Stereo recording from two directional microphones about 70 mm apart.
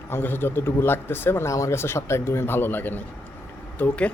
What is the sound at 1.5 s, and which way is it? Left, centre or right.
Speech, left.